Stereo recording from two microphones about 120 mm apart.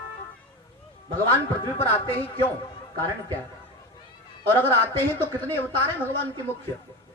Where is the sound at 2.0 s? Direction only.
15° left (ahead or behind).